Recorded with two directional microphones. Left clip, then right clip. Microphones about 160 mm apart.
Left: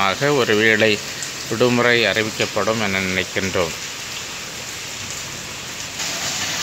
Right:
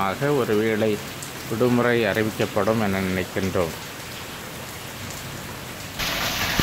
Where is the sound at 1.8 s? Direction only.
5° right (ahead or behind).